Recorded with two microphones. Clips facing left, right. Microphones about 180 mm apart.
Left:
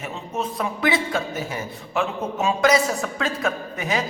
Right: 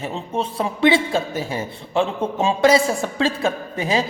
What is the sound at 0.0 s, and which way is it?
A man's voice, 30° right (ahead or behind).